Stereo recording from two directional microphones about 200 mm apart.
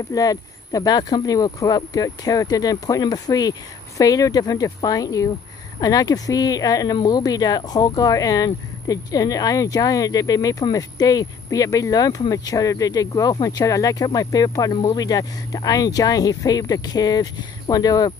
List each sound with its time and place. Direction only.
0.1 s speech: 20° left (ahead or behind)